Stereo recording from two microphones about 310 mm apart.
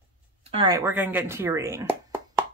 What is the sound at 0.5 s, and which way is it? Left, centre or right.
Speech, centre.